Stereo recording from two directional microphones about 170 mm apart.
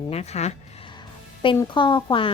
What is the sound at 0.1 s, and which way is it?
Speech, 40° left (ahead or behind).